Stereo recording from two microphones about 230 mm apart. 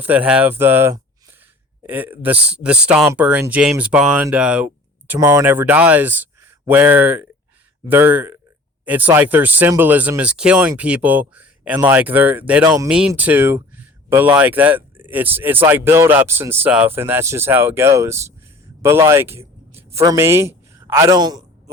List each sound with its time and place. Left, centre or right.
0.0 s a man's voice: centre